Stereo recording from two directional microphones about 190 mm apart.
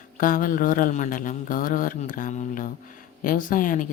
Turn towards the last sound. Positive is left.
turn(degrees=45)  # may be behind; listen again after turning